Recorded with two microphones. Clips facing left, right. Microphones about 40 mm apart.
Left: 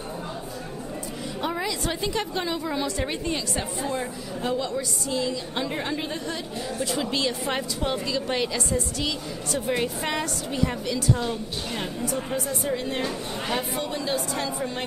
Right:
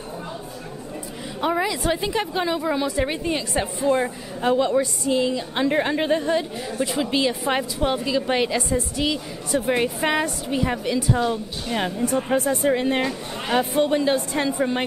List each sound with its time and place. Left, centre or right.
1.4 s a woman's voice: centre
11.7 s a woman's voice: right